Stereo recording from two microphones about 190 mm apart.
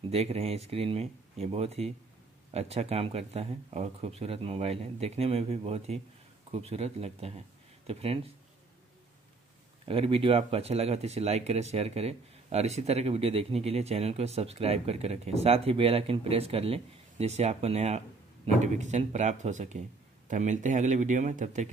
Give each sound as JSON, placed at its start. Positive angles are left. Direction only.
{"t": 0.1, "sound": "speech", "side_deg": -35}
{"t": 9.8, "sound": "speech", "side_deg": -30}